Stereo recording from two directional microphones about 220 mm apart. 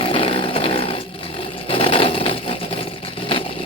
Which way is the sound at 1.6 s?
25° left (ahead or behind).